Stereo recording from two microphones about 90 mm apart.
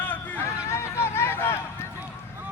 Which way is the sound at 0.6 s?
30° left (ahead or behind).